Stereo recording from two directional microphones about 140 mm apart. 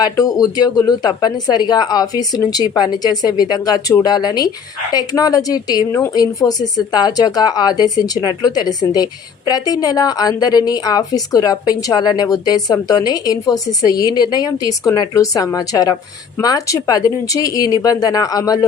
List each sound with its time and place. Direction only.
0.0 s a woman's voice: 25° left (ahead or behind)